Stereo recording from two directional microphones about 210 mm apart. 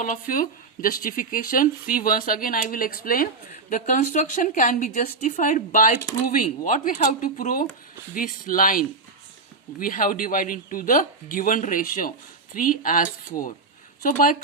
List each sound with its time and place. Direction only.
0.0 s speech: 40° left (ahead or behind)